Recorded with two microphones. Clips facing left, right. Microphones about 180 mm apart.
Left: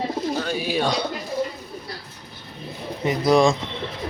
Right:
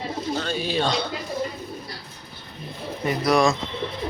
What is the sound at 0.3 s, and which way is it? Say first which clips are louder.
Speech: left 1 dB; 10° left (ahead or behind).